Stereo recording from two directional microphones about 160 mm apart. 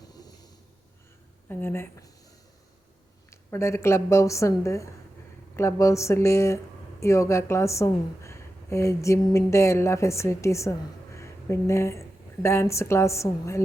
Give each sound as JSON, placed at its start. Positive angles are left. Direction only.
{"t": 0.1, "sound": "a sound", "side_deg": 25}
{"t": 1.5, "sound": "speech", "side_deg": 15}
{"t": 3.2, "sound": "a woman's voice", "side_deg": 15}